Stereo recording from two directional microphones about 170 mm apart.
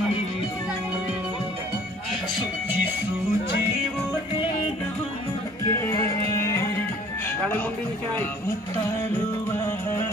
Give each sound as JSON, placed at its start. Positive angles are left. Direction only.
{"t": 5.7, "sound": "music", "side_deg": 15}